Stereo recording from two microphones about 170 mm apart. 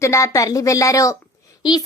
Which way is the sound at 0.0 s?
15° left (ahead or behind).